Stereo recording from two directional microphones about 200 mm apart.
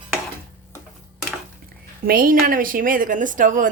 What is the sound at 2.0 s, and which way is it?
A woman's voice, 45° right (ahead or behind).